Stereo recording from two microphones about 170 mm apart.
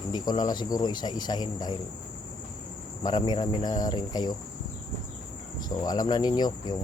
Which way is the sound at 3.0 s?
25° left (ahead or behind).